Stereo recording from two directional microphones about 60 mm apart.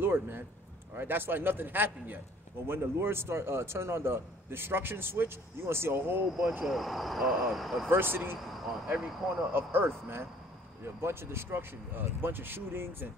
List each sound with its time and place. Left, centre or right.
0.0 s a man's voice: right
6.6 s speech: centre
7.9 s a man's voice: right
8.8 s speech: centre
9.5 s a man's voice: right